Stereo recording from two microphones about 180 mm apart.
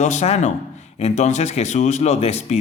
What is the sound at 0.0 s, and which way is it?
A man's voice, 40° left (ahead or behind).